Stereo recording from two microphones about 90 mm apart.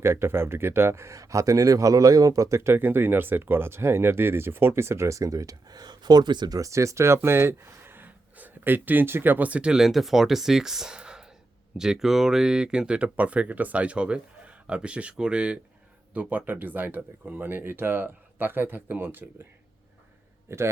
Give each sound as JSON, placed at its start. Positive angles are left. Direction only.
{"t": 0.0, "sound": "speech", "side_deg": -30}
{"t": 20.5, "sound": "a man's voice", "side_deg": -30}